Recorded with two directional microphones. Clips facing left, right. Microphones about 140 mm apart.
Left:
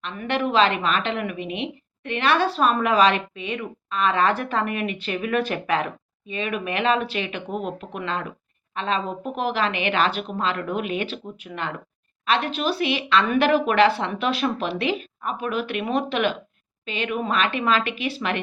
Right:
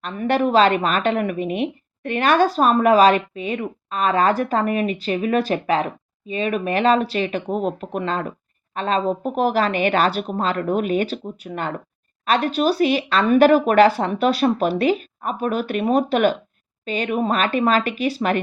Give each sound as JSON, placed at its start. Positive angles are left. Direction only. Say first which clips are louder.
{"t": 0.0, "sound": "a woman's voice", "louder": "right 5 dB", "side_deg": -40}